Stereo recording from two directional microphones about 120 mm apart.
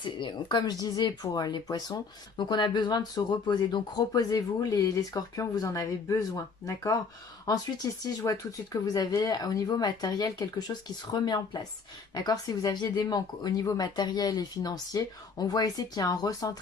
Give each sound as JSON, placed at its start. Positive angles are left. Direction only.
{"t": 0.0, "sound": "speech", "side_deg": 40}